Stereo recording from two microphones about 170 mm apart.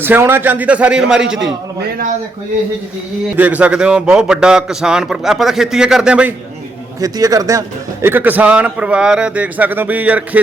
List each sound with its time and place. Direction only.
0.0 s a man's voice: 10° right (ahead or behind)
3.3 s a man's voice: 10° right (ahead or behind)
7.0 s a man's voice: 20° right (ahead or behind)